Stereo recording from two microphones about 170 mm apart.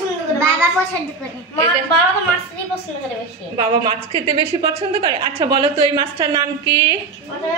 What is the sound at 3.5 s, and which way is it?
A woman's voice, 35° right (ahead or behind).